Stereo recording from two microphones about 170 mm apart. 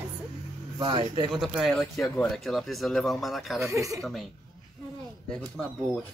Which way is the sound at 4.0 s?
Centre (ahead or behind).